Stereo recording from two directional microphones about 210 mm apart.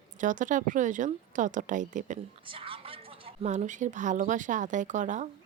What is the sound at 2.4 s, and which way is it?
Speech, 25° right (ahead or behind).